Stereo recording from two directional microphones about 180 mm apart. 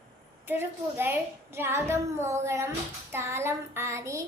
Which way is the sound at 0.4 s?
10° right (ahead or behind).